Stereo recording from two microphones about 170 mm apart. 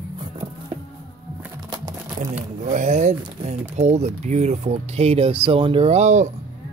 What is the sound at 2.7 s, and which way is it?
Speech, 45° right (ahead or behind).